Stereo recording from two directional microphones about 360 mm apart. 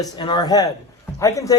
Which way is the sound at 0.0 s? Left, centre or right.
Centre.